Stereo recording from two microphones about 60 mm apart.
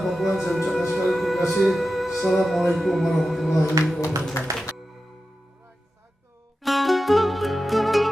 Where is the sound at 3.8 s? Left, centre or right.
Right.